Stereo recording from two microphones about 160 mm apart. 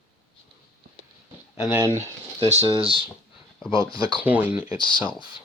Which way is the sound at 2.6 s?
30° right (ahead or behind).